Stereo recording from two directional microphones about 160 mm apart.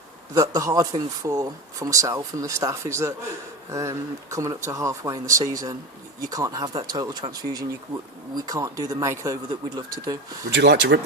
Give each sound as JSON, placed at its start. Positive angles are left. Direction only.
{"t": 0.3, "sound": "speech", "side_deg": -20}
{"t": 10.5, "sound": "speech", "side_deg": -90}